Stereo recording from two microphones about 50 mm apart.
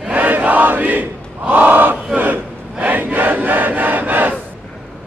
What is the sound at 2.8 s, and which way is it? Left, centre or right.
Crowd, right.